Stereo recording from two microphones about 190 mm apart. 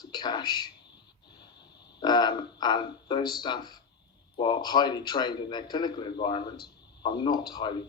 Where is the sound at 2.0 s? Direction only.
20° left (ahead or behind).